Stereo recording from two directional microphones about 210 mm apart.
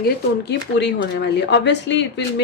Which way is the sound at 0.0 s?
55° left (ahead or behind).